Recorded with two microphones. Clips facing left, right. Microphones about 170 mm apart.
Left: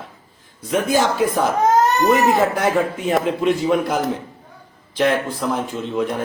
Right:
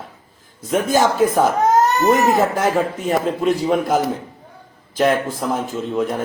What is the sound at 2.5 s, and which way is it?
Speech, 35° right (ahead or behind).